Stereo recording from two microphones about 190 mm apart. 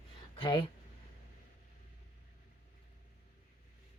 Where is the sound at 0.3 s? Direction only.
25° left (ahead or behind).